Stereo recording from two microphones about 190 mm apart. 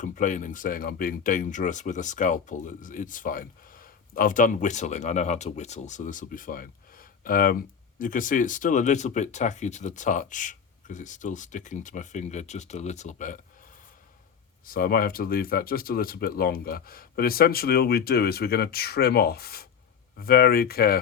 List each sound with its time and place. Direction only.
0.0 s speech: 40° left (ahead or behind)
14.6 s speech: 50° left (ahead or behind)